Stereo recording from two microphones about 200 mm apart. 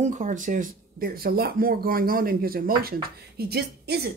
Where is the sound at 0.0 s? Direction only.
40° right (ahead or behind).